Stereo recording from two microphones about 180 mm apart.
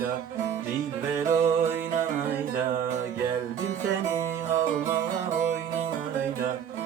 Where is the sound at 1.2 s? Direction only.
15° right (ahead or behind).